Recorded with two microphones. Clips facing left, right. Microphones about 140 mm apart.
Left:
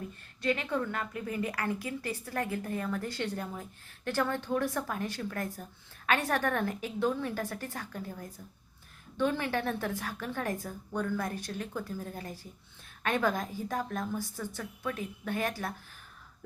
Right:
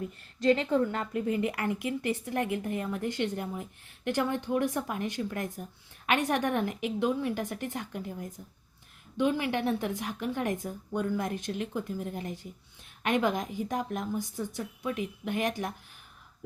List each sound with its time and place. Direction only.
0.4 s a woman's voice: 25° right (ahead or behind)